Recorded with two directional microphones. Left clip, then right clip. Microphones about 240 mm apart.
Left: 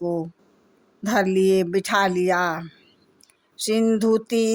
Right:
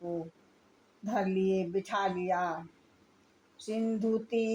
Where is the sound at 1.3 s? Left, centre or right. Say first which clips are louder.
Left 11 dB; left.